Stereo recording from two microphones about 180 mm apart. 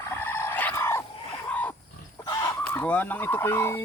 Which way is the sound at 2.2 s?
20° left (ahead or behind).